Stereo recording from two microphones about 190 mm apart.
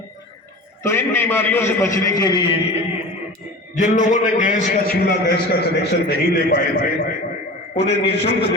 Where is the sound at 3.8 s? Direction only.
40° left (ahead or behind).